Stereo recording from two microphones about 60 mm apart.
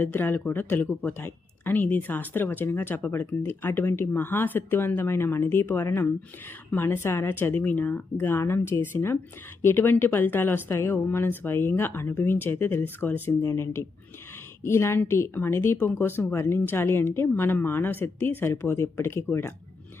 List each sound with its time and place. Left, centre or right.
0.0 s speech: left
7.3 s speech: left
13.4 s speech: left
14.6 s speech: left